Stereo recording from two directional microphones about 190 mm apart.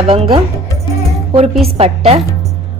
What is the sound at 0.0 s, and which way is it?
Speech, 30° right (ahead or behind).